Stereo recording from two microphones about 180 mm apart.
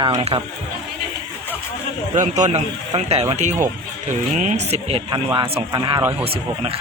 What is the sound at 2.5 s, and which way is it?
Speech, 35° right (ahead or behind).